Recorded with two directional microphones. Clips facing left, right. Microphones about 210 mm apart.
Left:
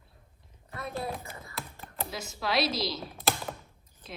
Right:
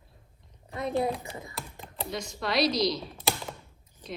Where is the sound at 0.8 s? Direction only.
15° right (ahead or behind).